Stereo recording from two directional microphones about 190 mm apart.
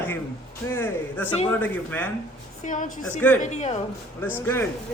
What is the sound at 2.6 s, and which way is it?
Speech, 40° left (ahead or behind).